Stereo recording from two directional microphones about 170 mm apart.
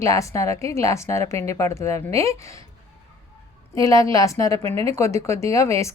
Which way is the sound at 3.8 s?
20° left (ahead or behind).